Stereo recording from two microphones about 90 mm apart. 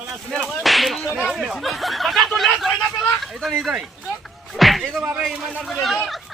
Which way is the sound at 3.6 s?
5° right (ahead or behind).